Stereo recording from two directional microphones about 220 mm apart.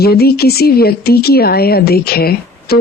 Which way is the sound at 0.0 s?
45° left (ahead or behind).